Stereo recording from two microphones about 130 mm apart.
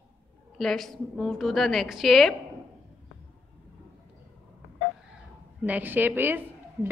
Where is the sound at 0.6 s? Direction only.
5° left (ahead or behind).